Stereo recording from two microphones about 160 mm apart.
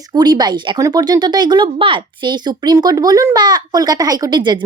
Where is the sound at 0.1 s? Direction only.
25° right (ahead or behind).